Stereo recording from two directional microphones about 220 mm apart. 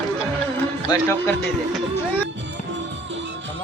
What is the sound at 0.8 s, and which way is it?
Speech, 20° left (ahead or behind).